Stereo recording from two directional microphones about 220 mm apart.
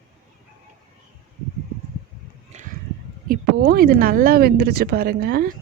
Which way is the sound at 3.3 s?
45° right (ahead or behind).